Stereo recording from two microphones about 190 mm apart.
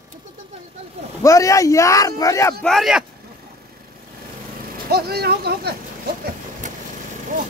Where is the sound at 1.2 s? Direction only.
15° left (ahead or behind).